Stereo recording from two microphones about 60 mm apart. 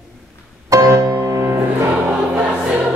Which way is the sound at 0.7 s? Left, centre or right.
Right.